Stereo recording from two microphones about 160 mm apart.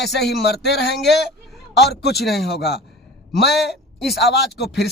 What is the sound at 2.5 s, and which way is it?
Speech, 90° left.